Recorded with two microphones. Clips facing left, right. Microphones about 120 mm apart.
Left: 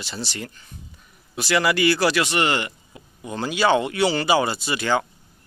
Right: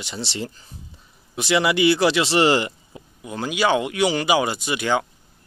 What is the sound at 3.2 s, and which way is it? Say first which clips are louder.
Speech: even; 5° right (ahead or behind).